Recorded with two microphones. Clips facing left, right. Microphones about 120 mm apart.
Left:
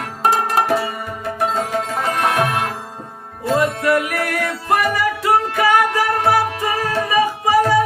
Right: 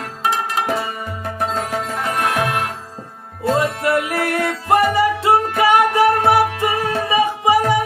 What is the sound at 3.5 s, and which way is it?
Music, 25° right (ahead or behind).